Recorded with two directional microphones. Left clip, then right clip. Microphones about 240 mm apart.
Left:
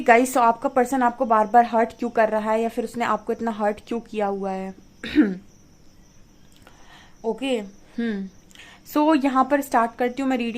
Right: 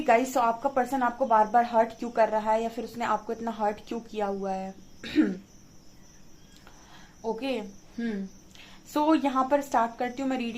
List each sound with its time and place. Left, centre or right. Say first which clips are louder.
0.0 s a woman's voice: left 7 dB; left
6.9 s a sound: left 5 dB; left
8.5 s a woman's voice: left 6 dB; left